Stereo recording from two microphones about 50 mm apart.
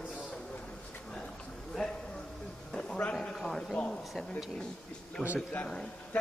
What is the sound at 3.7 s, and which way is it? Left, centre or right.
Speech, centre.